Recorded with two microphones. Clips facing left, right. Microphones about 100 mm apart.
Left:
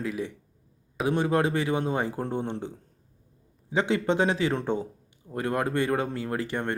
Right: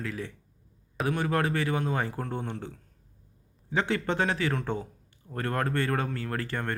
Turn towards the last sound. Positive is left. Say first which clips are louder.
# left 3 dB
turn(degrees=20)  # may be behind; listen again after turning